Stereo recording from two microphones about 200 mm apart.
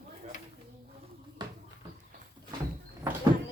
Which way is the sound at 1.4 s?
20° right (ahead or behind).